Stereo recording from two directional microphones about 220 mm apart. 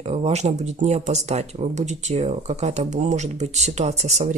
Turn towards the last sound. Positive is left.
turn(degrees=-30)  # may be behind; listen again after turning